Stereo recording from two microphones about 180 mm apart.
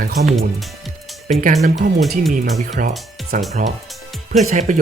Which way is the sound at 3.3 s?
45° right (ahead or behind).